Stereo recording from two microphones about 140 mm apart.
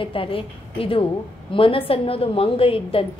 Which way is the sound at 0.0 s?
40° left (ahead or behind).